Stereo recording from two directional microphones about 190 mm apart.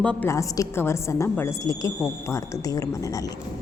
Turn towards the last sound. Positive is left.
turn(degrees=20)  # may be behind; listen again after turning